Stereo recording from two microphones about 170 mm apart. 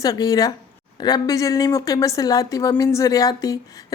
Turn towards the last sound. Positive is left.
turn(degrees=20)  # may be behind; listen again after turning